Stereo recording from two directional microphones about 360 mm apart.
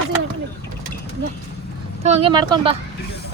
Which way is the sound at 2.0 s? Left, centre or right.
Centre.